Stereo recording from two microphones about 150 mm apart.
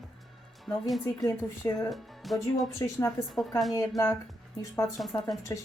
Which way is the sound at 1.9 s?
Centre (ahead or behind).